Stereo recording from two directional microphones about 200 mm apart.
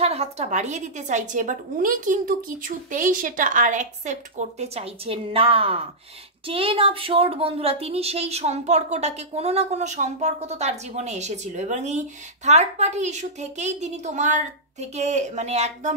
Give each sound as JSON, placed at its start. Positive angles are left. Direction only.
{"t": 0.0, "sound": "a woman's voice", "side_deg": -30}